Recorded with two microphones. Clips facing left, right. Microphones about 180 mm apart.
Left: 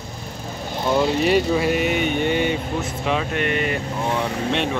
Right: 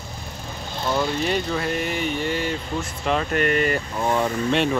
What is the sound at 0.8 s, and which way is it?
Speech, 25° left (ahead or behind).